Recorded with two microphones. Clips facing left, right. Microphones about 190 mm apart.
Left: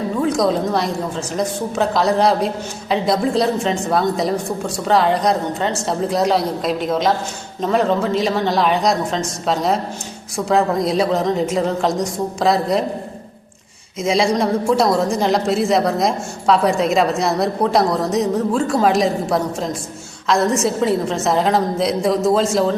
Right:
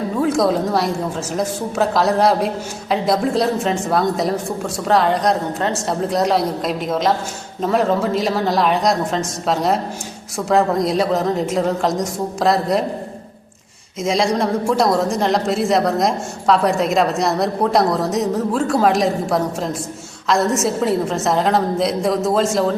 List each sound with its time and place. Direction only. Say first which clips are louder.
0.2 s speech: right 1 dB; 5° right (ahead or behind)
14.0 s speech: left 1 dB; centre (ahead or behind)